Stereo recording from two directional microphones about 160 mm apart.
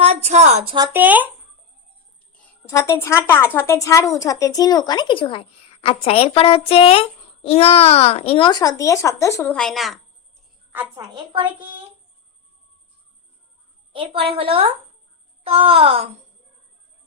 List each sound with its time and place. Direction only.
0.0 s a woman's voice: 40° right (ahead or behind)
0.9 s speech: 10° right (ahead or behind)
2.6 s a woman's voice: 15° left (ahead or behind)
9.5 s speech: 5° left (ahead or behind)
10.9 s a woman's voice: 25° right (ahead or behind)
13.9 s a woman's voice: 35° right (ahead or behind)